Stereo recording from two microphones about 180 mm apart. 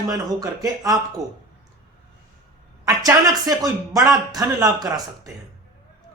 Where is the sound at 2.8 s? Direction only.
20° right (ahead or behind).